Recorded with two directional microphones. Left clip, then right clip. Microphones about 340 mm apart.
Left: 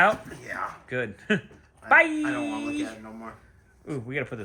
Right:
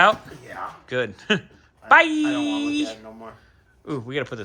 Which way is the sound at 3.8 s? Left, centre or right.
Centre.